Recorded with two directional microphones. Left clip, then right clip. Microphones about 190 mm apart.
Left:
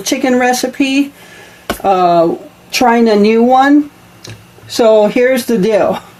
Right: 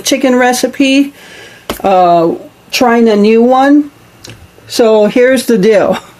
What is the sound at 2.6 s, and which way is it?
A woman's voice, 25° right (ahead or behind).